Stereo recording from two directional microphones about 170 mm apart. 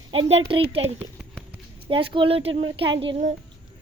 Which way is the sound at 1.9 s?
30° right (ahead or behind).